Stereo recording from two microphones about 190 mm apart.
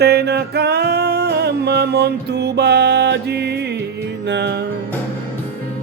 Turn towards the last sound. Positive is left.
turn(degrees=-65)  # may be behind; listen again after turning